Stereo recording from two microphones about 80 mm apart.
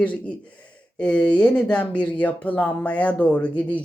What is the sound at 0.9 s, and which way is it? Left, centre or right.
Speech, centre.